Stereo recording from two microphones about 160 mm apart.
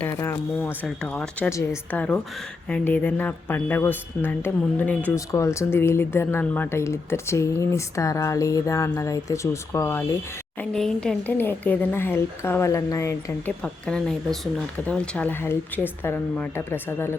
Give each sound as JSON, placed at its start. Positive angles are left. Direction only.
{"t": 0.1, "sound": "speech", "side_deg": 15}
{"t": 10.6, "sound": "speech", "side_deg": 5}
{"t": 13.6, "sound": "speech", "side_deg": 5}